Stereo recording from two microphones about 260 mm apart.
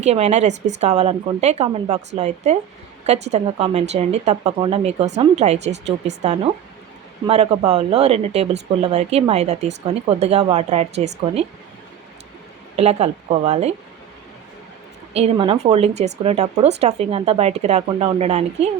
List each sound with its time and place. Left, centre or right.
0.0 s speech: right
12.7 s speech: right
15.1 s speech: right